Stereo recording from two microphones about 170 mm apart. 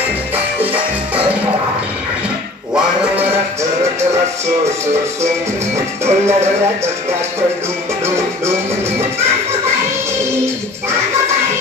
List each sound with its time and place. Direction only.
0.6 s music: 10° right (ahead or behind)
6.0 s music: 15° right (ahead or behind)